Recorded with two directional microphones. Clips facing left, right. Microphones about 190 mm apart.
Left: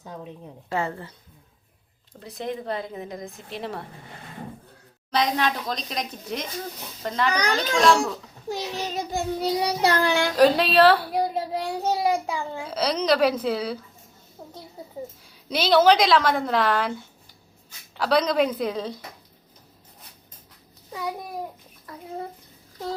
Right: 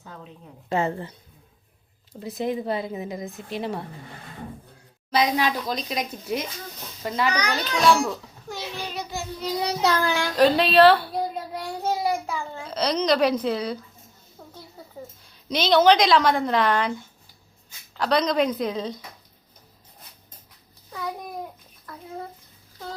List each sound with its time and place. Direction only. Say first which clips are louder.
0.0 s a sound: left 4 dB; 15° left (ahead or behind)
0.7 s a woman's voice: right 3 dB; 20° right (ahead or behind)
2.1 s speech: right 4 dB; 5° right (ahead or behind)
5.1 s speech: right 1 dB; 5° right (ahead or behind)
8.4 s a sound: left 4 dB; 35° left (ahead or behind)
8.9 s child singing: left 4 dB; 45° left (ahead or behind)
9.6 s a woman's voice: right 1 dB; 15° left (ahead or behind)
11.5 s a sound: left 2 dB; 20° left (ahead or behind)
14.4 s a sound: left 3 dB; 20° left (ahead or behind)
15.3 s speech: even; 5° left (ahead or behind)
17.9 s speech: left 1 dB; 5° left (ahead or behind)
20.9 s babbling: left 1 dB; 10° left (ahead or behind)